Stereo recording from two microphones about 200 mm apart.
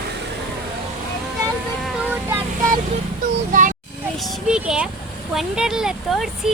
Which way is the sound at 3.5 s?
40° right (ahead or behind).